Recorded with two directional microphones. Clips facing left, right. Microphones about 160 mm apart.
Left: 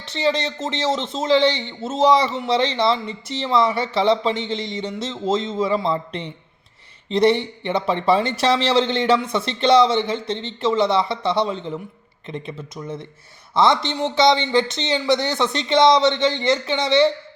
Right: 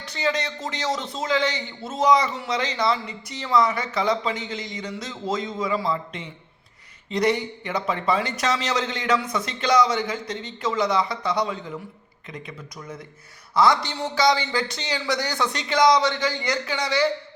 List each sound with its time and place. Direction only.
0.0 s a man's voice: 25° left (ahead or behind)